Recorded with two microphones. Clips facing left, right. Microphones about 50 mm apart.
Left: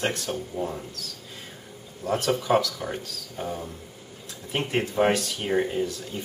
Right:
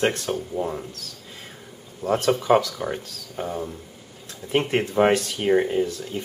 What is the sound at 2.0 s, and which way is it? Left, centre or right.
Speech, centre.